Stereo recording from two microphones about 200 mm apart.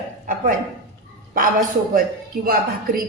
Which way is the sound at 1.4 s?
45° right (ahead or behind).